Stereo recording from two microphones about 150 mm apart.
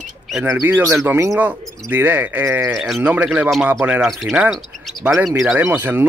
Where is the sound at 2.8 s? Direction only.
5° right (ahead or behind).